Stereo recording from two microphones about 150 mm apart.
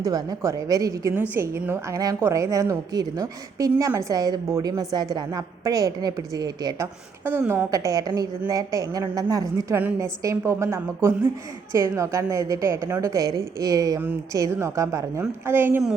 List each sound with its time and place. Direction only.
0.0 s a woman's voice: 25° right (ahead or behind)
7.3 s a woman's voice: 15° right (ahead or behind)